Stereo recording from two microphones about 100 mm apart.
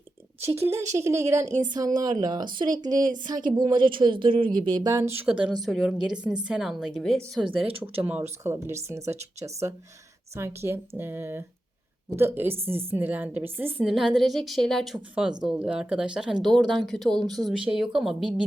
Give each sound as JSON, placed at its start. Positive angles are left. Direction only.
{"t": 0.4, "sound": "speech", "side_deg": -30}
{"t": 4.9, "sound": "speech", "side_deg": -25}
{"t": 5.2, "sound": "speech", "side_deg": -10}
{"t": 5.6, "sound": "a woman's voice", "side_deg": 0}
{"t": 7.4, "sound": "speech", "side_deg": -65}
{"t": 8.2, "sound": "speech", "side_deg": -25}
{"t": 10.3, "sound": "speech", "side_deg": -25}
{"t": 13.8, "sound": "a woman's voice", "side_deg": -5}
{"t": 14.9, "sound": "a woman's voice", "side_deg": -10}